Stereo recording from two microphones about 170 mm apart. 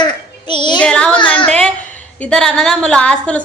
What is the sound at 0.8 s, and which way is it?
Child singing, 5° left (ahead or behind).